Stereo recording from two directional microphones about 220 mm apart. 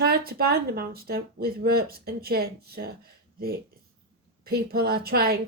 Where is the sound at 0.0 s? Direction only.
45° right (ahead or behind).